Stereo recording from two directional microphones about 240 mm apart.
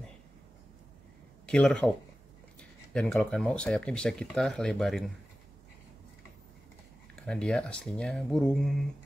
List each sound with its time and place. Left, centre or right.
1.4 s speech: centre
7.2 s speech: centre